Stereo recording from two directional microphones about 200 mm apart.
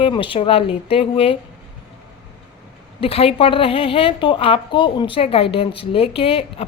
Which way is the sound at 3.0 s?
30° left (ahead or behind).